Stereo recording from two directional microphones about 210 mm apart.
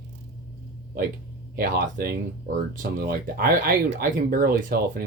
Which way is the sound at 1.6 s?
45° right (ahead or behind).